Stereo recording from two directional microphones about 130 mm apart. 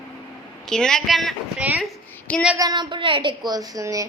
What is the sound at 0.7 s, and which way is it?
Speech, 5° left (ahead or behind).